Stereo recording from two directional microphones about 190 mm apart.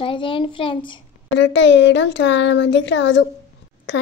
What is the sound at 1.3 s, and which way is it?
Speech, 70° left (ahead or behind).